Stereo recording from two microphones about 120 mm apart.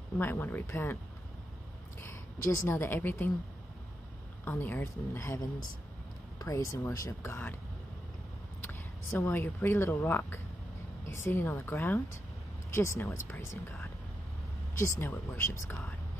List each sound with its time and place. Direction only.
0.2 s speech: 15° left (ahead or behind)
2.0 s a woman's voice: 25° left (ahead or behind)
4.5 s speech: 20° left (ahead or behind)
6.4 s speech: 25° left (ahead or behind)
8.6 s speech: 20° left (ahead or behind)